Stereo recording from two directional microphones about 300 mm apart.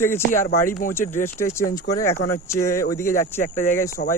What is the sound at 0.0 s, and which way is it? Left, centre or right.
Speech, centre.